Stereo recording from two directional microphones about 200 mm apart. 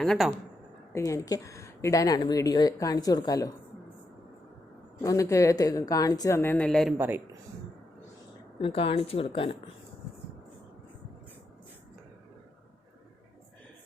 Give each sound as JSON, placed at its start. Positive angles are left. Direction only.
{"t": 0.0, "sound": "a man's voice", "side_deg": 0}
{"t": 0.9, "sound": "speech", "side_deg": 15}
{"t": 5.0, "sound": "speech", "side_deg": 15}
{"t": 6.9, "sound": "speech", "side_deg": -10}
{"t": 8.6, "sound": "speech", "side_deg": 25}